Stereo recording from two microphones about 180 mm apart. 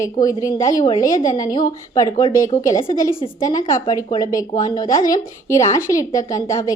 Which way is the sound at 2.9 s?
50° left (ahead or behind).